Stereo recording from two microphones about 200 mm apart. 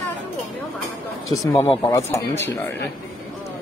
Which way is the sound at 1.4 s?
15° left (ahead or behind).